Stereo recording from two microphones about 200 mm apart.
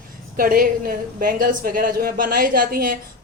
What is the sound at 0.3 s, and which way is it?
A woman's voice, 45° right (ahead or behind).